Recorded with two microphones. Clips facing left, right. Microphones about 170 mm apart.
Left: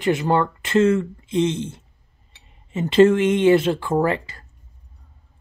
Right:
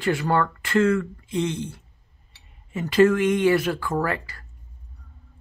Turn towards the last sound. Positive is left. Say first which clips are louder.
# left 5 dB
turn(degrees=25)  # may be behind; listen again after turning